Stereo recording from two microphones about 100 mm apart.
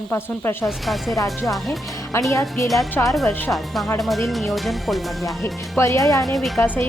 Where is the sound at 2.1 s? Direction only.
30° left (ahead or behind).